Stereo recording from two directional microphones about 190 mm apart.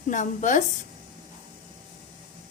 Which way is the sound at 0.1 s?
40° left (ahead or behind).